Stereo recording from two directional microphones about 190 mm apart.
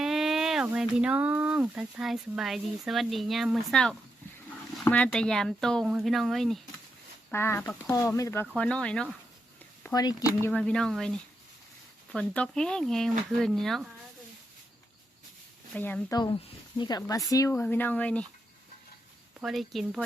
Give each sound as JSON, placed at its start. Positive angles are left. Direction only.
{"t": 0.0, "sound": "speech", "side_deg": 0}
{"t": 7.3, "sound": "speech", "side_deg": 15}
{"t": 9.8, "sound": "speech", "side_deg": 20}
{"t": 10.4, "sound": "speech", "side_deg": 5}
{"t": 15.7, "sound": "speech", "side_deg": 10}
{"t": 19.4, "sound": "speech", "side_deg": 0}